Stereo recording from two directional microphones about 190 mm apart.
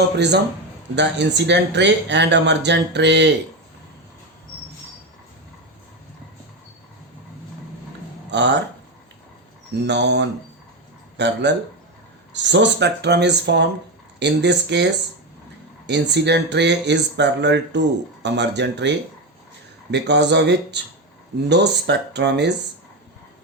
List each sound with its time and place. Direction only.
0.9 s speech: 65° right (ahead or behind)
8.3 s speech: 65° right (ahead or behind)
9.8 s speech: 65° right (ahead or behind)